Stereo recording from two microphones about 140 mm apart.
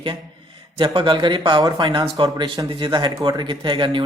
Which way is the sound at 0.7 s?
40° right (ahead or behind).